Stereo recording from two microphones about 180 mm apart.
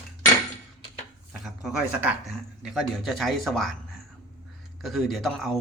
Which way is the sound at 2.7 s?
Centre (ahead or behind).